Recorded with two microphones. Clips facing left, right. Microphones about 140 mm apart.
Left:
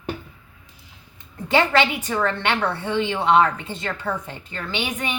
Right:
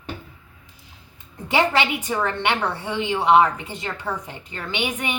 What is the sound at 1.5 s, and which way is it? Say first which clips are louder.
A woman's voice: left 1 dB; 15° right (ahead or behind).